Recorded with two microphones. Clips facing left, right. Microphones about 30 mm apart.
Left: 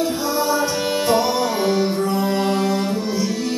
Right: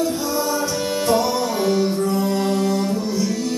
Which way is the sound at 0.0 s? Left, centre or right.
Left.